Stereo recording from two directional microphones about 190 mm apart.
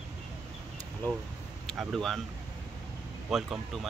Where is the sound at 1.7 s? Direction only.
Centre (ahead or behind).